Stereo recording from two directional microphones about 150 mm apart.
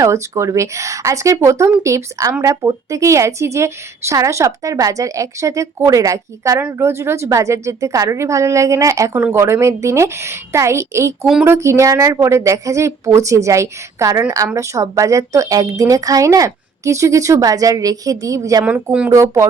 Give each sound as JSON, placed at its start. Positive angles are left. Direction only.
{"t": 0.0, "sound": "a woman's voice", "side_deg": -20}
{"t": 18.6, "sound": "speech", "side_deg": -10}
{"t": 19.1, "sound": "a woman's voice", "side_deg": -20}